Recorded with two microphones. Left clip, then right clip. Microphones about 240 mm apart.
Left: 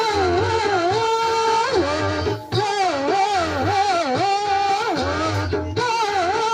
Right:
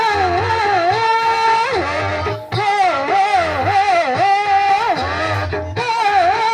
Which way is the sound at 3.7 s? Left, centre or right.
Right.